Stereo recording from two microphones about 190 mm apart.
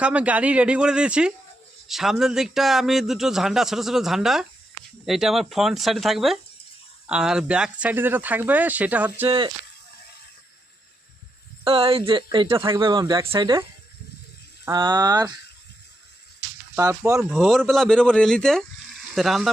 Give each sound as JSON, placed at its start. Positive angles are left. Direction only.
{"t": 0.0, "sound": "a man's voice", "side_deg": -5}
{"t": 9.2, "sound": "speech", "side_deg": -25}
{"t": 11.6, "sound": "speech", "side_deg": -30}
{"t": 16.7, "sound": "a man's voice", "side_deg": -10}